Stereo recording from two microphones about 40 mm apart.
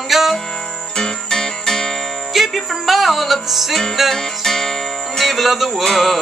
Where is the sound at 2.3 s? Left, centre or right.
Centre.